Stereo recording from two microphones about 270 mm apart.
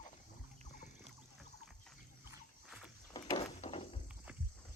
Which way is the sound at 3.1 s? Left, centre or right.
Centre.